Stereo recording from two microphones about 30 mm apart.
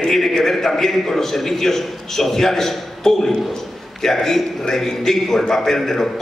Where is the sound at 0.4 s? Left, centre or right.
Centre.